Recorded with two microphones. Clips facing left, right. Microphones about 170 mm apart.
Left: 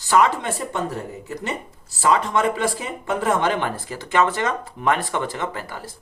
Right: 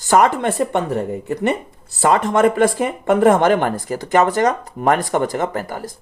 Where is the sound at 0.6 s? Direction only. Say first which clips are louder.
Right 8 dB; 65° right (ahead or behind).